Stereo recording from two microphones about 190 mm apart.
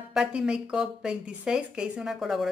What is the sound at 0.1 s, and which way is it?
Speech, 5° right (ahead or behind).